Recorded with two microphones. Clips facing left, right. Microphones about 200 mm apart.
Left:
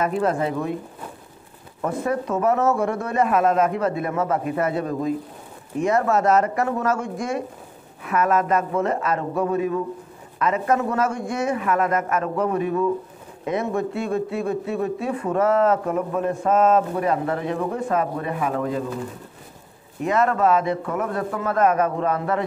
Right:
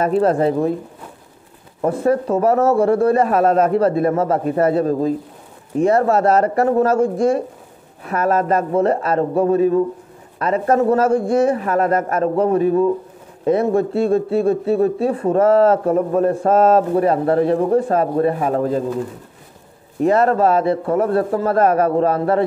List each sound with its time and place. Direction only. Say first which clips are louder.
0.0 s a man's voice: right 6 dB; 35° right (ahead or behind)
1.8 s a man's voice: right 7 dB; 30° right (ahead or behind)
20.0 s a man's voice: right 6 dB; 35° right (ahead or behind)